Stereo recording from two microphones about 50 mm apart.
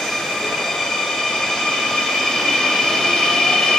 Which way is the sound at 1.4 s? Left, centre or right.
Centre.